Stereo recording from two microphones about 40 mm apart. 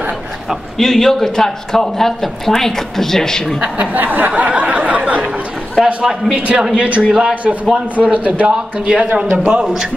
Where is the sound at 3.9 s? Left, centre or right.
Right.